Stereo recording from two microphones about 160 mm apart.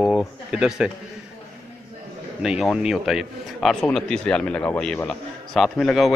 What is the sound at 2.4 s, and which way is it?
A man's voice, 5° right (ahead or behind).